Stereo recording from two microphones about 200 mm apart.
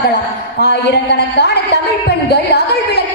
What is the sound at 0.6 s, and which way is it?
A woman's voice, 55° left (ahead or behind).